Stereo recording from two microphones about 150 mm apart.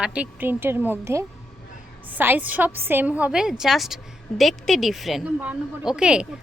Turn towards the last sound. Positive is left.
turn(degrees=-5)  # may be behind; listen again after turning